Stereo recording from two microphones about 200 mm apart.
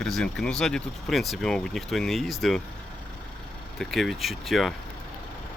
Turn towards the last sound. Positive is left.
turn(degrees=0)  # may be behind; listen again after turning